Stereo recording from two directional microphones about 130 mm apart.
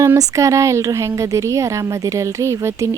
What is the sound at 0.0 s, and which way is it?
Speech, 25° right (ahead or behind).